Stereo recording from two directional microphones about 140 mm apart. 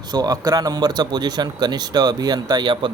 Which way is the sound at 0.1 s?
30° right (ahead or behind).